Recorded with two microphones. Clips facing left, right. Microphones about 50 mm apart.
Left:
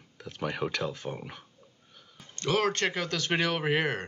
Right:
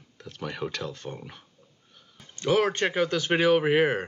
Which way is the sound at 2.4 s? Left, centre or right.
Centre.